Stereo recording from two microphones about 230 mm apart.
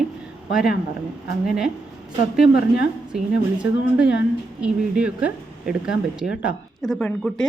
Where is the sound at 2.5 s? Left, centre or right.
Left.